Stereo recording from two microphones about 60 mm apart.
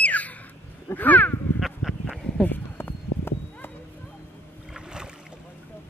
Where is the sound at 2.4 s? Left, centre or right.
Left.